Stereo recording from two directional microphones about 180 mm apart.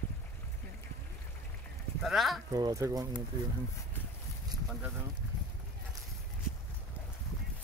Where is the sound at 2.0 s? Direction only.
Centre (ahead or behind).